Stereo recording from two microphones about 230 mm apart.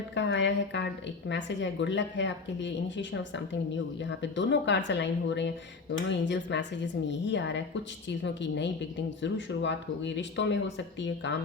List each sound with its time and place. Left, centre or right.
0.1 s speech: left